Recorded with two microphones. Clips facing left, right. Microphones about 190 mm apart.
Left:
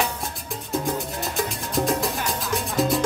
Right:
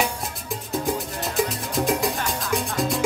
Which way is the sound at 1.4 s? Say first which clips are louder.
Right 2 dB; centre (ahead or behind).